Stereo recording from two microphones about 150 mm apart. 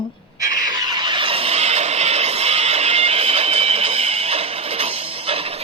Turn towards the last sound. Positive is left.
turn(degrees=-40)  # may be behind; listen again after turning